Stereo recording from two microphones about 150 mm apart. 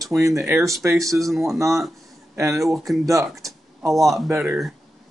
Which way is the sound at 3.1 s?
20° right (ahead or behind).